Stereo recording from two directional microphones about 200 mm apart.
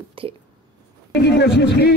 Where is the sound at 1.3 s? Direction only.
55° left (ahead or behind).